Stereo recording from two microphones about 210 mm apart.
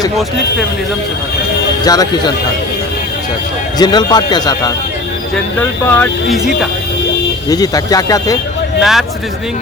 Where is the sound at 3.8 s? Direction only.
20° left (ahead or behind).